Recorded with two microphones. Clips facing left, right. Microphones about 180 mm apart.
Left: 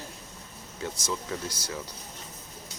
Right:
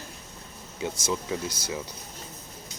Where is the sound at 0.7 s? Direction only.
20° right (ahead or behind).